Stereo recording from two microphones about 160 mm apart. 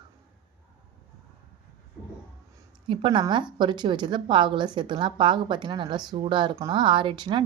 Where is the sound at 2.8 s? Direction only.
30° right (ahead or behind).